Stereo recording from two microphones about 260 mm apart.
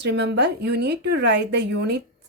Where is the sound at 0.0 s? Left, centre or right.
Right.